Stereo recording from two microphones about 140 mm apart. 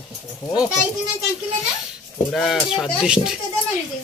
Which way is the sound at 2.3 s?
5° left (ahead or behind).